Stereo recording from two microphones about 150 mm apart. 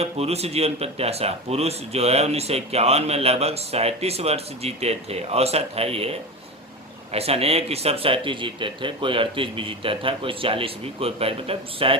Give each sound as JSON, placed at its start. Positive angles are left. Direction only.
{"t": 0.0, "sound": "speech", "side_deg": -45}